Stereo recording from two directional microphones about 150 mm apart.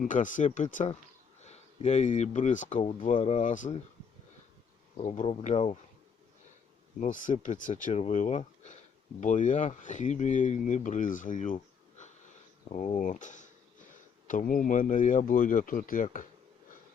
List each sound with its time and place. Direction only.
0.0 s speech: 60° left (ahead or behind)
5.2 s speech: 45° left (ahead or behind)
7.0 s speech: 60° left (ahead or behind)